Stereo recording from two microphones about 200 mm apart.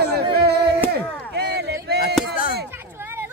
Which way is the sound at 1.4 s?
55° right (ahead or behind).